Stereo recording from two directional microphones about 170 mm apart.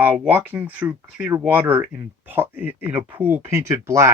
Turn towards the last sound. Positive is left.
turn(degrees=-15)  # may be behind; listen again after turning